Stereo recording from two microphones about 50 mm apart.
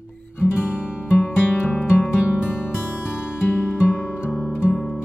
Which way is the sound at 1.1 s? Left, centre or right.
Left.